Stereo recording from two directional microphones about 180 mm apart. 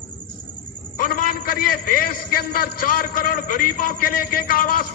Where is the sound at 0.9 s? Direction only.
50° left (ahead or behind).